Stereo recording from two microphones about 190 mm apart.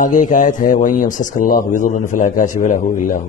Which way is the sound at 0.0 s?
40° left (ahead or behind).